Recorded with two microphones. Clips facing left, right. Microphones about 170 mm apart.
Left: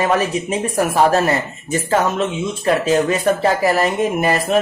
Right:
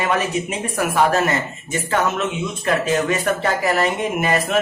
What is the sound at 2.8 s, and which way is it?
Speech, 30° left (ahead or behind).